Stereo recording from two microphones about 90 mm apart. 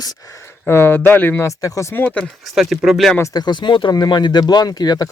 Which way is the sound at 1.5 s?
35° left (ahead or behind).